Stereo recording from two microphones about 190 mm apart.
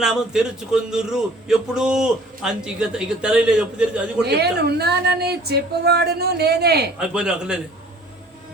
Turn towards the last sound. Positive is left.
turn(degrees=-5)  # may be behind; listen again after turning